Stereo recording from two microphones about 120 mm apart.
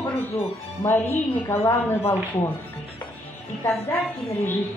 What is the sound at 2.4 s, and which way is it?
Speech, 60° left (ahead or behind).